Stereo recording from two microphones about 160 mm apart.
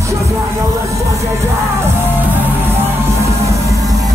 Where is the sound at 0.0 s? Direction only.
20° right (ahead or behind).